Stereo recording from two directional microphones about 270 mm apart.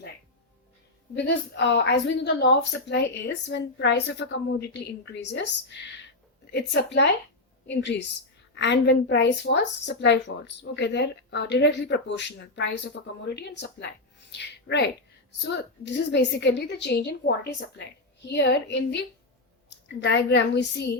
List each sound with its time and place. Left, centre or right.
1.1 s a woman's voice: left